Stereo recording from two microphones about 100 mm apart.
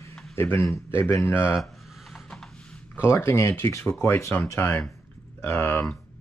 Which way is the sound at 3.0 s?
25° left (ahead or behind).